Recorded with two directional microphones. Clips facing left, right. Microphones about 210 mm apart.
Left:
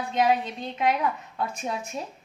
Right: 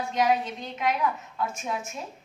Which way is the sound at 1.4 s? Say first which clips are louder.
Left 1 dB; 35° left (ahead or behind).